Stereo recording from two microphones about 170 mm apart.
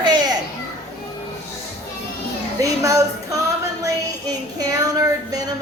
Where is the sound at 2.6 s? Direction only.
20° right (ahead or behind).